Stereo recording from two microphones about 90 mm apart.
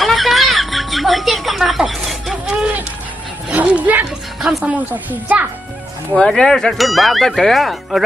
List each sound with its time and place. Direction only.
0.0 s music: centre (ahead or behind)
3.4 s dog: 15° right (ahead or behind)
4.6 s a child's voice: 15° right (ahead or behind)
6.1 s speech: 10° left (ahead or behind)